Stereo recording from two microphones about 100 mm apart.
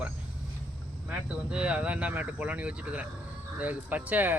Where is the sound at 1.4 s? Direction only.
10° right (ahead or behind).